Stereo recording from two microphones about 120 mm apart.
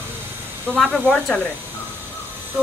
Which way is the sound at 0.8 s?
10° left (ahead or behind).